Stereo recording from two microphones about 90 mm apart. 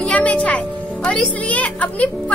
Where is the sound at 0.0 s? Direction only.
15° left (ahead or behind).